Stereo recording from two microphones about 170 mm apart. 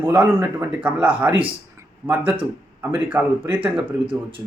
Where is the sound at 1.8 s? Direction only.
15° right (ahead or behind).